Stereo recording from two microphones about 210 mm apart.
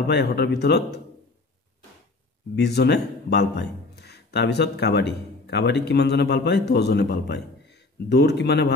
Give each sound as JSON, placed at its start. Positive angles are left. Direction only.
{"t": 0.0, "sound": "a man's voice", "side_deg": 50}
{"t": 2.5, "sound": "speech", "side_deg": 50}